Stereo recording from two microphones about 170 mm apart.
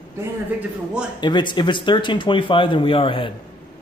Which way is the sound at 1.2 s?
25° left (ahead or behind).